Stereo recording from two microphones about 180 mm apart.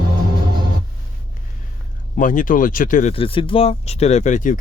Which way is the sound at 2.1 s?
45° left (ahead or behind).